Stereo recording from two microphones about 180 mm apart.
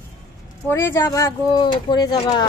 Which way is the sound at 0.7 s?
15° left (ahead or behind).